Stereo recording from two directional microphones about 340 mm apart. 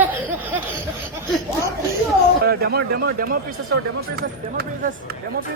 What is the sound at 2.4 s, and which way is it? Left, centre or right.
Speech, right.